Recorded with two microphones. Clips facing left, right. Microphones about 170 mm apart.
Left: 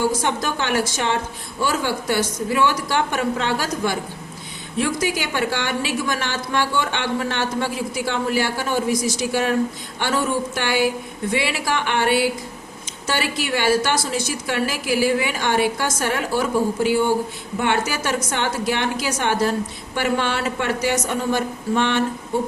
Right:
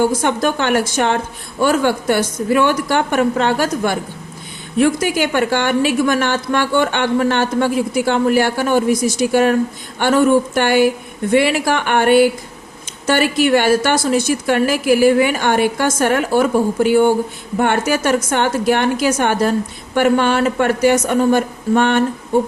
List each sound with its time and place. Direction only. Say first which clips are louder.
0.0 s a woman's voice: right 6 dB; 55° right (ahead or behind)